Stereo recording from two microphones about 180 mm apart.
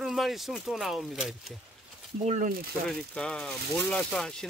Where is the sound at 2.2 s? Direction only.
40° right (ahead or behind).